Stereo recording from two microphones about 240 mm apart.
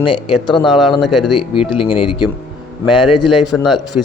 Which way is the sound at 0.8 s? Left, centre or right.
Centre.